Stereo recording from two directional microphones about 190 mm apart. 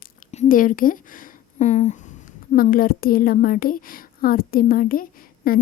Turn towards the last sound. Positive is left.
turn(degrees=50)  # may be behind; listen again after turning